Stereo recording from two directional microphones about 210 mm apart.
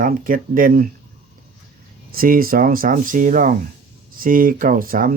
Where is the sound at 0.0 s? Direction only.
40° right (ahead or behind).